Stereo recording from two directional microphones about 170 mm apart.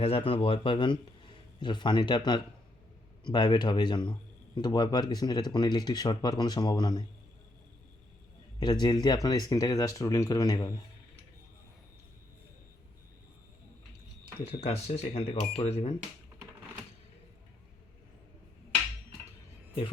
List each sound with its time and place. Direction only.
0.0 s speech: 35° left (ahead or behind)
8.5 s speech: 25° left (ahead or behind)
14.3 s speech: 30° left (ahead or behind)